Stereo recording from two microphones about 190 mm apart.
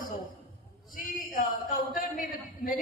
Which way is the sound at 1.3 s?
45° left (ahead or behind).